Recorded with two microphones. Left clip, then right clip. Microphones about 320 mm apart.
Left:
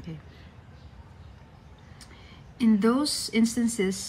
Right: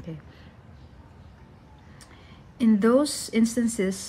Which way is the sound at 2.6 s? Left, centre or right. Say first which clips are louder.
Right 3 dB; centre.